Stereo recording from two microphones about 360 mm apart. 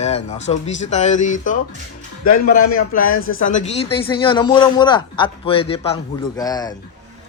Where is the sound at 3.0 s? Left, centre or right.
Left.